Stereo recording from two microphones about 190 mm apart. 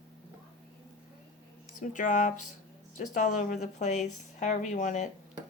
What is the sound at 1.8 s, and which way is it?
A woman's voice, 40° left (ahead or behind).